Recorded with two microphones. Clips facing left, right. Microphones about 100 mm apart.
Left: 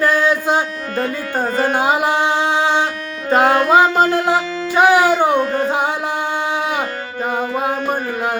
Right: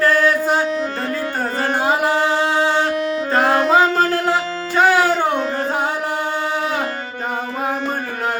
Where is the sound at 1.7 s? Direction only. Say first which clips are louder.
Right 1 dB; 15° left (ahead or behind).